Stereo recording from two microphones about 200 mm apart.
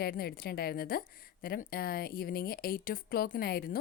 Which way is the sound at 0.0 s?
50° left (ahead or behind).